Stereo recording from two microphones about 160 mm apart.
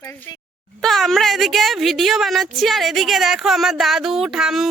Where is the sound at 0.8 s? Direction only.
Centre (ahead or behind).